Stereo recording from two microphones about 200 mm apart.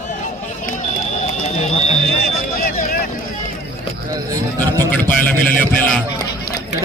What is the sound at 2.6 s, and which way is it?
Vehicle, 45° left (ahead or behind).